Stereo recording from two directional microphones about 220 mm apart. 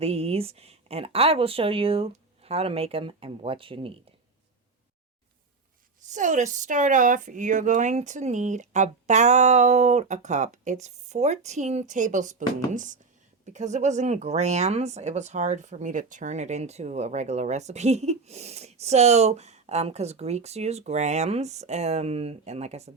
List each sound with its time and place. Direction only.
0.0 s speech: 25° right (ahead or behind)
6.1 s speech: 35° right (ahead or behind)